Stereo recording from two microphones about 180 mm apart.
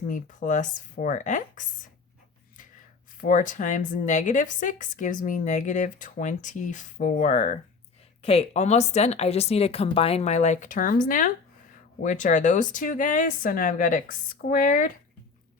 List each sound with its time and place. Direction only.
0.1 s speech: 45° left (ahead or behind)
3.2 s speech: 45° left (ahead or behind)